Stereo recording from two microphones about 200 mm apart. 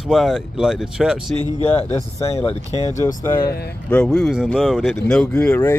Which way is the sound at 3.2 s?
20° left (ahead or behind).